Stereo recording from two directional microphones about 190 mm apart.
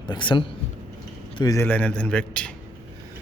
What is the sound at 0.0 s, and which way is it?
A man's voice, 25° left (ahead or behind).